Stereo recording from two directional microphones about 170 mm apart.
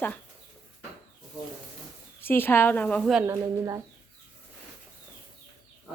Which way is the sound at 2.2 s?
10° left (ahead or behind).